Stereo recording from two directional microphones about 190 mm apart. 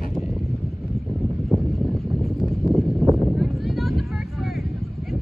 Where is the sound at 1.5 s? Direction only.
Centre (ahead or behind).